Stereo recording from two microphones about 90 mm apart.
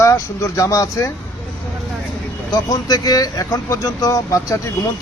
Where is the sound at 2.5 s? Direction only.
45° left (ahead or behind).